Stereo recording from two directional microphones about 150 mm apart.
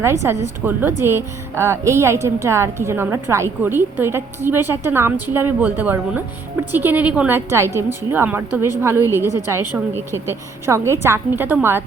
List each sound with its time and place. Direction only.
0.0 s a woman's voice: 20° right (ahead or behind)